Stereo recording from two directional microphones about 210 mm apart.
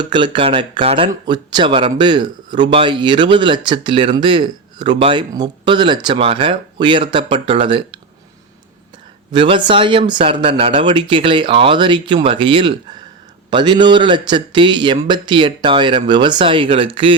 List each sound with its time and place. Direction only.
0.0 s speech: 20° right (ahead or behind)
9.3 s speech: 25° right (ahead or behind)